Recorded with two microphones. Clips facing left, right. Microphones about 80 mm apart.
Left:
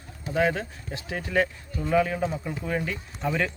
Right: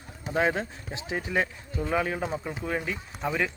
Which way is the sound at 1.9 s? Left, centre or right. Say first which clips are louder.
Left 5 dB; right.